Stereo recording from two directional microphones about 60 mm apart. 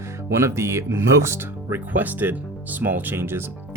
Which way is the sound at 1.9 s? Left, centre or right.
Right.